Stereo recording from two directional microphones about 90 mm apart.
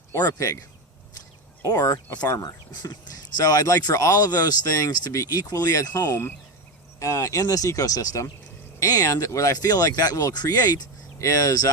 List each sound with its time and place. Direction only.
0.1 s speech: 40° left (ahead or behind)
1.6 s speech: 40° left (ahead or behind)
2.5 s speech: 45° left (ahead or behind)